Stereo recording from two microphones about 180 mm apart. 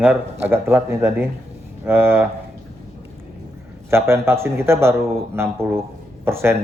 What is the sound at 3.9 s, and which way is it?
A man's voice, 15° right (ahead or behind).